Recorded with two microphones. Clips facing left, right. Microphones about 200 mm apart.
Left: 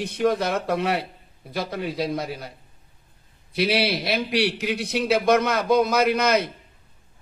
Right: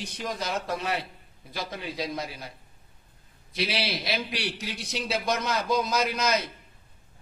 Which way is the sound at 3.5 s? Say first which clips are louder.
Left 8 dB; 60° left (ahead or behind).